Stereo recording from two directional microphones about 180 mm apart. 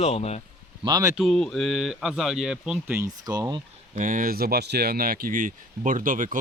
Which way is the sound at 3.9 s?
50° right (ahead or behind).